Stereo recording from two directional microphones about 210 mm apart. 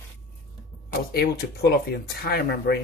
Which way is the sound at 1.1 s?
45° left (ahead or behind).